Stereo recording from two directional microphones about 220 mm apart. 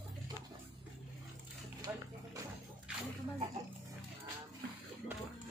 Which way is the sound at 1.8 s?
15° right (ahead or behind).